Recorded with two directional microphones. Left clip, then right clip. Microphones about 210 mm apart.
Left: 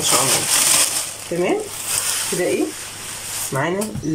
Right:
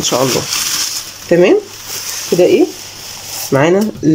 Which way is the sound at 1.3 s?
55° right (ahead or behind).